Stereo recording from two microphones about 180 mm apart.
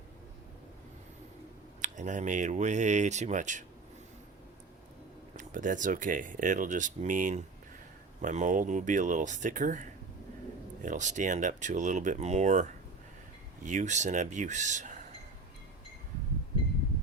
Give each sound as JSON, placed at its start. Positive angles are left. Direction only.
{"t": 1.8, "sound": "speech", "side_deg": -45}
{"t": 5.4, "sound": "speech", "side_deg": -45}